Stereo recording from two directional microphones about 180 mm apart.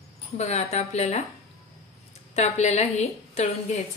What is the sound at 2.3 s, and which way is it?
A woman's voice, 40° left (ahead or behind).